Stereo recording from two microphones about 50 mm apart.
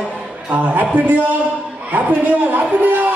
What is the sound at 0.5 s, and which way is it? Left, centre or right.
A man's voice, right.